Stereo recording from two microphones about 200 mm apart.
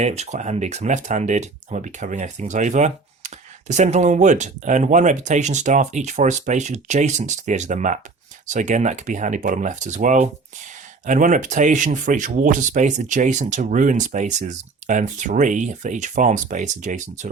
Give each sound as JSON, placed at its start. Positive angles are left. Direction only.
{"t": 0.0, "sound": "speech", "side_deg": -35}